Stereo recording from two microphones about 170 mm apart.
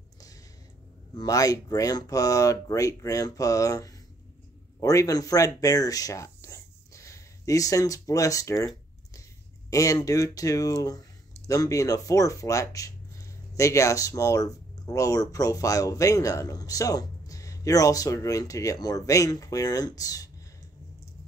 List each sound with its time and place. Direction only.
1.1 s speech: 20° left (ahead or behind)